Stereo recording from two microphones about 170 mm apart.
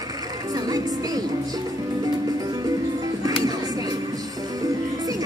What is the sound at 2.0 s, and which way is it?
Music, 20° right (ahead or behind).